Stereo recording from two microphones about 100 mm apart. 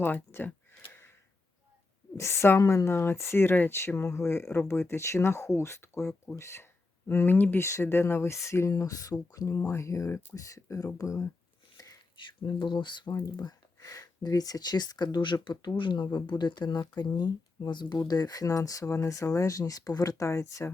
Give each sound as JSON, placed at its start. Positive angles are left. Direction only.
{"t": 0.0, "sound": "speech", "side_deg": 20}
{"t": 2.1, "sound": "speech", "side_deg": 25}
{"t": 11.8, "sound": "a sound", "side_deg": 35}
{"t": 12.1, "sound": "speech", "side_deg": 50}
{"t": 13.1, "sound": "speech", "side_deg": 40}